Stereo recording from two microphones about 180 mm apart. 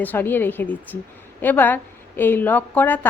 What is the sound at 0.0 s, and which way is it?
A woman's voice, 10° left (ahead or behind).